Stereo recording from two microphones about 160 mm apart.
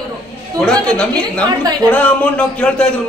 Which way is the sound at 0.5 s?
5° left (ahead or behind).